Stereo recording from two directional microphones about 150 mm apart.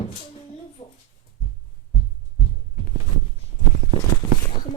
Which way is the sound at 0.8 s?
35° left (ahead or behind).